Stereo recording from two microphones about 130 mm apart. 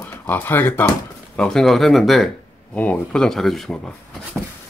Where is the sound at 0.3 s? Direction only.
15° left (ahead or behind).